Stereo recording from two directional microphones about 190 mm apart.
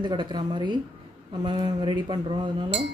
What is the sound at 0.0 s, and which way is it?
Speech, 25° right (ahead or behind).